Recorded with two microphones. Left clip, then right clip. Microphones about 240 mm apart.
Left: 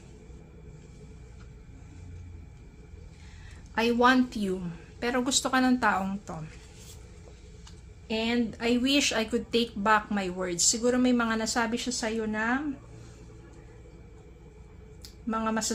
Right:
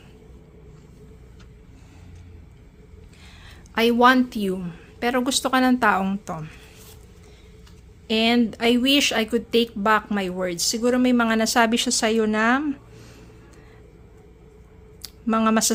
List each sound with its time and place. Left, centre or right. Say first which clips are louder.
3.8 s a woman's voice: right 6 dB; right
8.0 s speech: right 9 dB; right
15.0 s speech: right 9 dB; right